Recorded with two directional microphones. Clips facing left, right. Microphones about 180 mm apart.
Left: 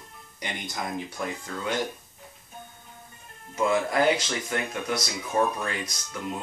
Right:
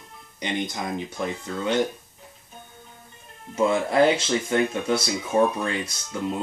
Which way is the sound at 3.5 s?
25° right (ahead or behind).